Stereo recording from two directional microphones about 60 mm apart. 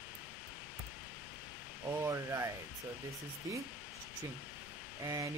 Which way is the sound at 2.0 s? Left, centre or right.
Right.